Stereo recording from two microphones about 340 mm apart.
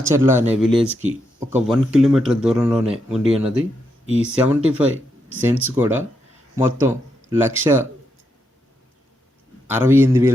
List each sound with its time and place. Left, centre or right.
0.0 s speech: centre
9.6 s speech: centre